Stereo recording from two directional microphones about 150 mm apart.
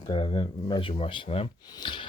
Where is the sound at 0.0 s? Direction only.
35° left (ahead or behind).